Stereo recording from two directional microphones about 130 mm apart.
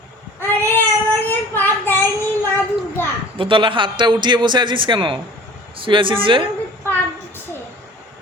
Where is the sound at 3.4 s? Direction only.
40° right (ahead or behind).